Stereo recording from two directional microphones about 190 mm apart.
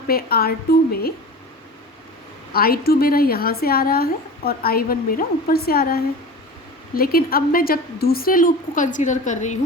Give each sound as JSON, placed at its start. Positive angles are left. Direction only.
{"t": 0.1, "sound": "a woman's voice", "side_deg": 55}
{"t": 2.5, "sound": "a woman's voice", "side_deg": 50}